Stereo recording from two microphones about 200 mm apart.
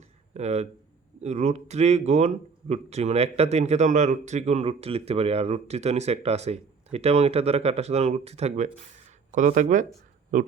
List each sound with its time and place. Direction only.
0.3 s speech: 35° right (ahead or behind)